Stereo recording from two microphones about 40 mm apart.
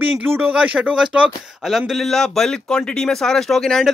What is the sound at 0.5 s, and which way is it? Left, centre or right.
Speech, right.